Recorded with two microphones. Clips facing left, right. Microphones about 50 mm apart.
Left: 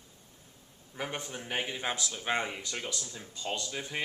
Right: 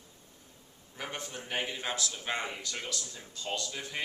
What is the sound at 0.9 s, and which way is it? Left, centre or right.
Speech, centre.